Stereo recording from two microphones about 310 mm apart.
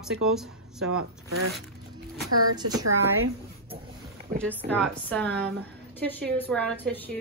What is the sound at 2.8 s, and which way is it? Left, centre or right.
Speech, right.